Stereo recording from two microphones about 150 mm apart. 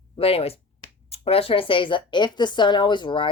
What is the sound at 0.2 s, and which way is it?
Speech, 40° left (ahead or behind).